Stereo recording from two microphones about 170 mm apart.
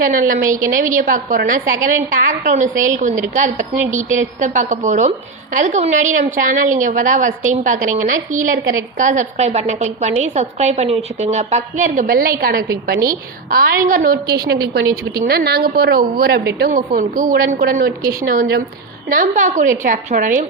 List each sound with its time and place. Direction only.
0.0 s a woman's voice: 55° right (ahead or behind)
18.0 s speech: 20° right (ahead or behind)
18.3 s a woman's voice: 65° right (ahead or behind)
19.0 s a woman's voice: 55° right (ahead or behind)